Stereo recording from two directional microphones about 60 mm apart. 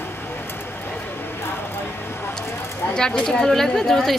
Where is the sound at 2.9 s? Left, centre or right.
Centre.